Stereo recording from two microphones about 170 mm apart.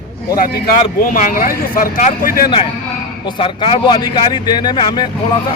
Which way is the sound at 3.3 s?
30° left (ahead or behind).